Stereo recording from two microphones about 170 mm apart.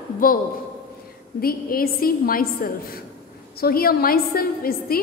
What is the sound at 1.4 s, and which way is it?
A woman's voice, 60° left (ahead or behind).